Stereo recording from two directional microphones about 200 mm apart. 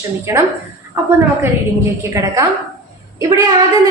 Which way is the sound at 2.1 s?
15° right (ahead or behind).